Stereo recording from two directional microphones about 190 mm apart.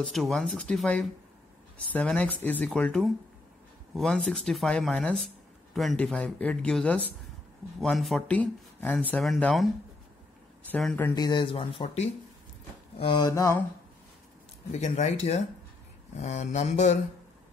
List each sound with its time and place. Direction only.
0.0 s speech: centre (ahead or behind)
10.7 s speech: 5° left (ahead or behind)
11.1 s speech: 25° left (ahead or behind)
13.3 s speech: 15° left (ahead or behind)
14.7 s mantra: 35° left (ahead or behind)